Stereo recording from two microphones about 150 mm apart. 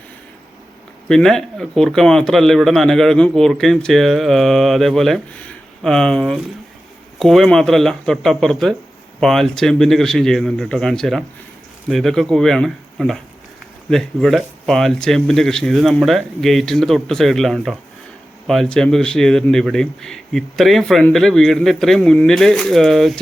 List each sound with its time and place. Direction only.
1.0 s a man's voice: 5° left (ahead or behind)